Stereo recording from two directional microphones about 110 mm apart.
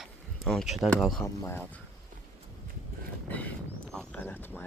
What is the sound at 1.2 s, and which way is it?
Speech, 25° left (ahead or behind).